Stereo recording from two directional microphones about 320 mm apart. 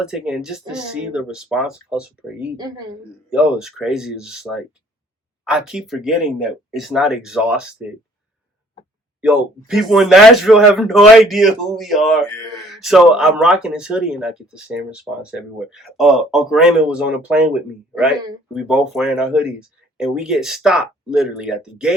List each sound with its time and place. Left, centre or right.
0.0 s a man's voice: centre
9.2 s a man's voice: centre